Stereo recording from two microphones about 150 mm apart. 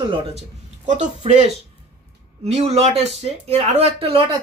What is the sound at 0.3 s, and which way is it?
Speech, 50° right (ahead or behind).